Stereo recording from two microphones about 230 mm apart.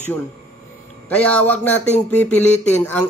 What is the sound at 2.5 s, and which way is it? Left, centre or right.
Speech, left.